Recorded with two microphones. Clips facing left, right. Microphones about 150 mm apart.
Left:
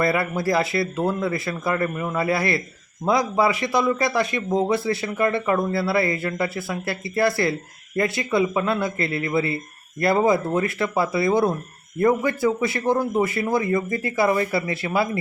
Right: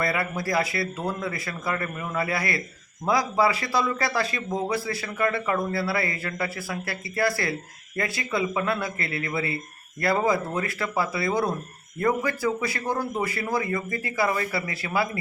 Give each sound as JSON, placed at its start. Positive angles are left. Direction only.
{"t": 0.0, "sound": "speech", "side_deg": 30}